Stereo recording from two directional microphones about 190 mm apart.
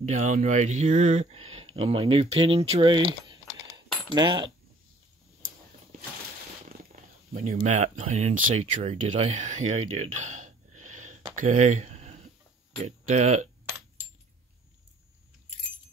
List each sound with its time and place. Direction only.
0.0 s speech: 40° right (ahead or behind); by 4.5 s 25° right (ahead or behind)
7.3 s speech: 40° right (ahead or behind)
10.1 s gasp: 40° right (ahead or behind)
11.3 s speech: 45° right (ahead or behind)